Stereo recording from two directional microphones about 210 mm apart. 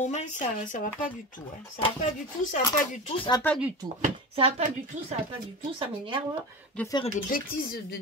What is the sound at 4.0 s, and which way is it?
Speech, 30° right (ahead or behind).